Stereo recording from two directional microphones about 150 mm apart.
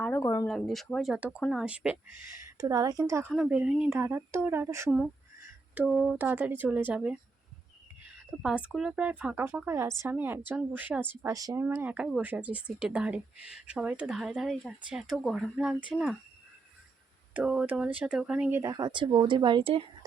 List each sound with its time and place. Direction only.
0.0 s a sound: 15° left (ahead or behind)
0.4 s speech: centre (ahead or behind)
2.6 s a woman's voice: 25° right (ahead or behind)
3.3 s speech: 5° right (ahead or behind)
5.7 s speech: 5° right (ahead or behind)
8.4 s speech: 5° right (ahead or behind)
17.3 s speech: 5° right (ahead or behind)
18.6 s speech: 25° right (ahead or behind)